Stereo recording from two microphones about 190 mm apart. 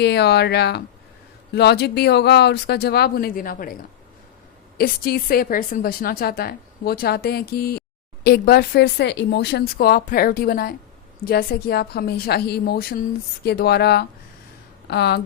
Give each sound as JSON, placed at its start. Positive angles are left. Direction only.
{"t": 0.0, "sound": "a woman's voice", "side_deg": 60}
{"t": 4.8, "sound": "a woman's voice", "side_deg": 55}